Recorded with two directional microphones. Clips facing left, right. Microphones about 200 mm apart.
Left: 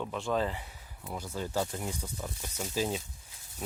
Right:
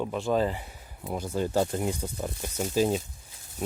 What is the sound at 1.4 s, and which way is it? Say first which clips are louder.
Speech: right 7 dB; 55° right (ahead or behind).